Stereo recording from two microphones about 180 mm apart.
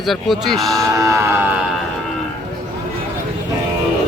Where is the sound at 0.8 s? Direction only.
15° right (ahead or behind).